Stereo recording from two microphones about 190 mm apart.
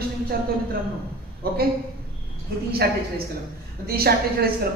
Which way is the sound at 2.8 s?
55° right (ahead or behind).